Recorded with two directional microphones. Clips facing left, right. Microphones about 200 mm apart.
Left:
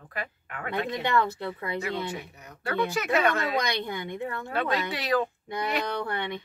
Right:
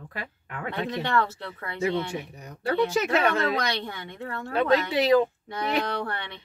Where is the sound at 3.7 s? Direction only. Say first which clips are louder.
Left 2 dB; 15° left (ahead or behind).